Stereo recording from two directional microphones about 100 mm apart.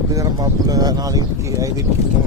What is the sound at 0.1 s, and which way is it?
Speech, 35° right (ahead or behind).